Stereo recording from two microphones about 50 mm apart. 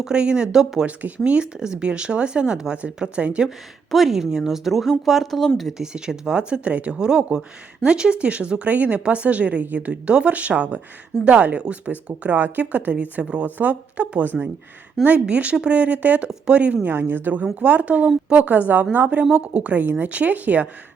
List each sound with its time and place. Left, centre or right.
0.0 s speech: centre
0.9 s speech: right
3.9 s speech: centre
5.7 s speech: centre
16.8 s a woman's voice: right
17.4 s speech: right
19.8 s speech: right
20.1 s speech: right